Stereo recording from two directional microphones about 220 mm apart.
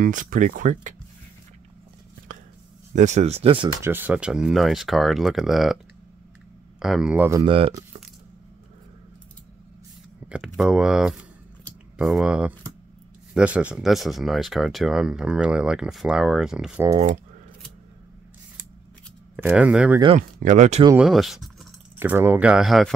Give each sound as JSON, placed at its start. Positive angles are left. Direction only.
{"t": 0.0, "sound": "speech", "side_deg": -35}
{"t": 2.9, "sound": "speech", "side_deg": -35}
{"t": 3.8, "sound": "speech", "side_deg": -10}
{"t": 6.8, "sound": "speech", "side_deg": 0}
{"t": 7.4, "sound": "speech", "side_deg": -25}
{"t": 10.2, "sound": "speech", "side_deg": -5}
{"t": 11.6, "sound": "typing", "side_deg": 0}
{"t": 13.3, "sound": "speech", "side_deg": -5}
{"t": 19.3, "sound": "speech", "side_deg": -5}
{"t": 20.2, "sound": "speech", "side_deg": -35}
{"t": 21.0, "sound": "speech", "side_deg": 0}